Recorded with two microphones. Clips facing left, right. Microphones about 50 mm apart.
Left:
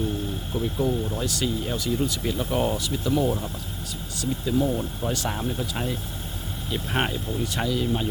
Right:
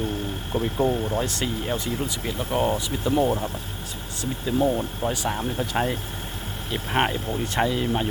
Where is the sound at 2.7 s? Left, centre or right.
Right; by 5.5 s centre.